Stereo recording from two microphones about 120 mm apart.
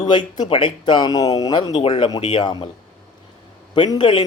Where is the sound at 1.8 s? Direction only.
45° left (ahead or behind).